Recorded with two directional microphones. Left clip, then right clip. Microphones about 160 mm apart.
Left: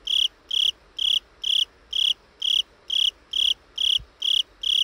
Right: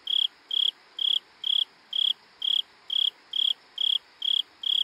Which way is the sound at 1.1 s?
35° left (ahead or behind).